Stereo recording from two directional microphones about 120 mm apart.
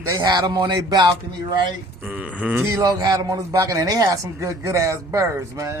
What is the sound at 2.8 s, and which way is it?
A man's voice, 35° right (ahead or behind).